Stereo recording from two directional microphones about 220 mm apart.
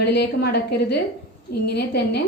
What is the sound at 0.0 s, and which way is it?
A woman's voice, 50° left (ahead or behind).